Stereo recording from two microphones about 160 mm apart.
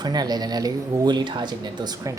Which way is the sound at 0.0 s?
25° right (ahead or behind).